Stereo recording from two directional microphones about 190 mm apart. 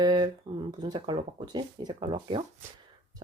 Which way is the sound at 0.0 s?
20° right (ahead or behind).